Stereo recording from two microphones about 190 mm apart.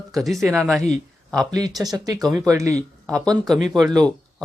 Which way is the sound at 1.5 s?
20° right (ahead or behind).